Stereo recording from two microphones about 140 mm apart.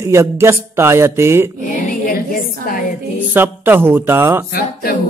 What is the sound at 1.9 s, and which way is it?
Music, 90° left.